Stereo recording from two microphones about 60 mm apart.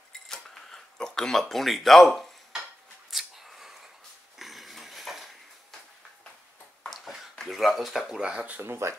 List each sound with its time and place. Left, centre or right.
0.3 s a sound: centre
1.4 s speech: centre
3.1 s a sound: centre
4.4 s dog: centre
7.4 s speech: centre
8.2 s speech: centre
8.5 s speech: right